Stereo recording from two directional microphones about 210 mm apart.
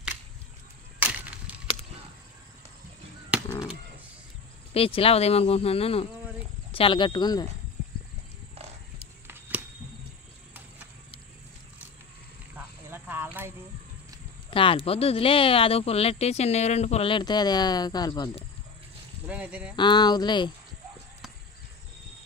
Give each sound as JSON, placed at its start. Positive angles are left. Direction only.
{"t": 3.4, "sound": "a sound", "side_deg": 20}
{"t": 4.7, "sound": "speech", "side_deg": 25}
{"t": 12.5, "sound": "cricket", "side_deg": -10}
{"t": 14.5, "sound": "speech", "side_deg": 25}
{"t": 19.2, "sound": "speech", "side_deg": -5}
{"t": 19.7, "sound": "speech", "side_deg": 20}